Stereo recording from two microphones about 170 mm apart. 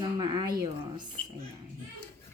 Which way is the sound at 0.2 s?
25° right (ahead or behind).